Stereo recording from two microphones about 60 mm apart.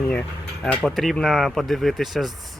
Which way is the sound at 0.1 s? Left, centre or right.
Centre.